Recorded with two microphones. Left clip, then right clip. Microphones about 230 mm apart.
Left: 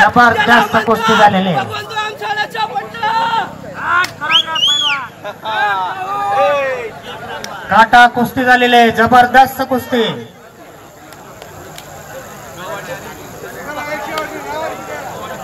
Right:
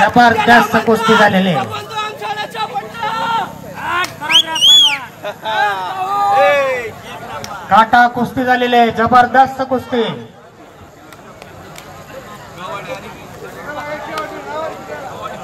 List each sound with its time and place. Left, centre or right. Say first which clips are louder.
0.1 s speech: even; right
0.4 s a man's voice: even; centre
1.2 s speech: left 2 dB; right
1.6 s a sound: left 1 dB; centre
3.7 s arrow: left 5 dB; right
4.2 s a sound: right 1 dB; right
5.9 s speech: right 3 dB; right
6.5 s speech: right 2 dB; right
7.4 s a man's voice: left 1 dB; centre
8.2 s a man's voice: left 4 dB; centre
8.8 s a man's voice: left 2 dB; left
13.7 s a sound: left 2 dB; left